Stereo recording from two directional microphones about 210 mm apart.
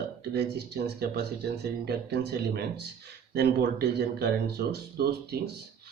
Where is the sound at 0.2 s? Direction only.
50° right (ahead or behind).